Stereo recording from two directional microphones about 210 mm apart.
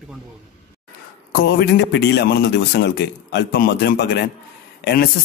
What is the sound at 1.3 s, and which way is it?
Speech, 50° left (ahead or behind).